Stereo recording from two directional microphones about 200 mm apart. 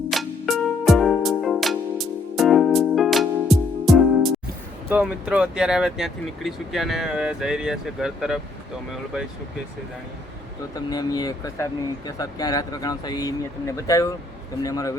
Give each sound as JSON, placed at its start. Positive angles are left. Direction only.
{"t": 0.1, "sound": "music", "side_deg": 0}
{"t": 4.9, "sound": "speech", "side_deg": -5}
{"t": 10.8, "sound": "speech", "side_deg": 20}